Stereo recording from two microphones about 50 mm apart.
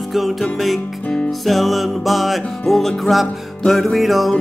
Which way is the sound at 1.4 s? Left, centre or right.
Centre.